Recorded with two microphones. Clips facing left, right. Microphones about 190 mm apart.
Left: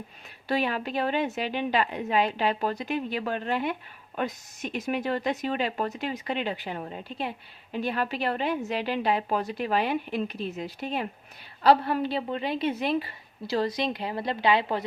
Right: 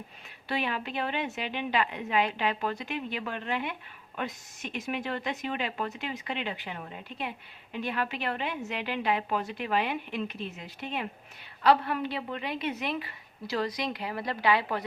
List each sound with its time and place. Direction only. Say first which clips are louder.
0.4 s a woman's voice: left 5 dB; 40° left (ahead or behind)